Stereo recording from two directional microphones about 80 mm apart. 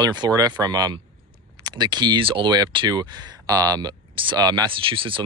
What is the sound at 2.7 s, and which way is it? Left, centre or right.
Speech, right.